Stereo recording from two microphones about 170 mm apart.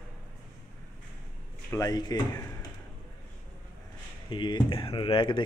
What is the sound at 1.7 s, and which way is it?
Speech, 20° left (ahead or behind).